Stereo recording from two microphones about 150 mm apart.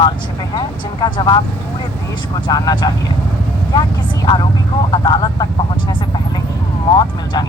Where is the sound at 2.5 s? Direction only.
25° left (ahead or behind).